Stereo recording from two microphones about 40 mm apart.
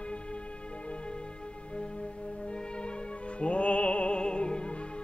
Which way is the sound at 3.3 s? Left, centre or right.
Left.